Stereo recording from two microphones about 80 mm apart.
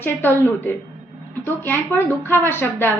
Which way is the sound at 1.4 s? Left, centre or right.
Left.